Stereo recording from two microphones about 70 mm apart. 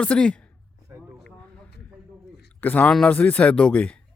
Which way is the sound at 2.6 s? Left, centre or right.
Left.